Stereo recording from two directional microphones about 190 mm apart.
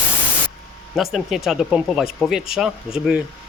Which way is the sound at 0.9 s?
Centre (ahead or behind).